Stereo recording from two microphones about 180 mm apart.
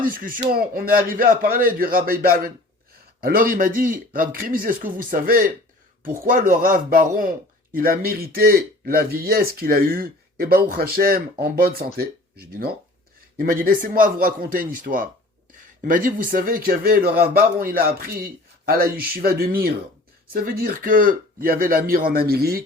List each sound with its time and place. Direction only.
0.0 s a man's voice: 50° right (ahead or behind)